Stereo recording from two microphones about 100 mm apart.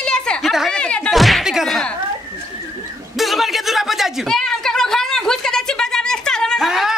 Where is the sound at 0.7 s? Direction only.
10° left (ahead or behind).